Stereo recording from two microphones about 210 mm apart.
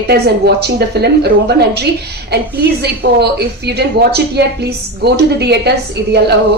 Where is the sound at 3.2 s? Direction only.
50° right (ahead or behind).